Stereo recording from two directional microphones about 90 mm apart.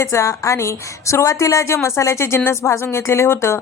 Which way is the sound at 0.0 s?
35° left (ahead or behind).